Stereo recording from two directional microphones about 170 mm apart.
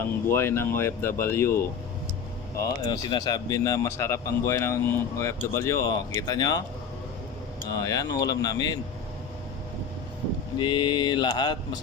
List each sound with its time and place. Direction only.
0.3 s speech: 15° left (ahead or behind)
7.7 s speech: 20° left (ahead or behind)
10.6 s speech: 25° left (ahead or behind)